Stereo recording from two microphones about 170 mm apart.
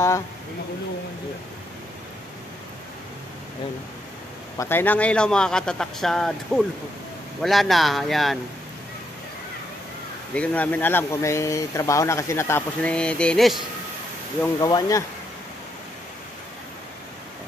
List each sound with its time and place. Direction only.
4.6 s a man's voice: 10° left (ahead or behind)
10.3 s speech: 10° left (ahead or behind)
14.4 s speech: 20° left (ahead or behind)